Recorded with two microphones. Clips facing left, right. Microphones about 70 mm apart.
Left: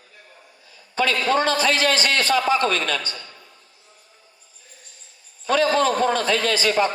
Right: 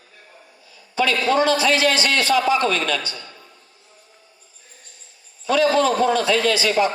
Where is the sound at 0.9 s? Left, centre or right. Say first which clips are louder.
Right 1 dB; left.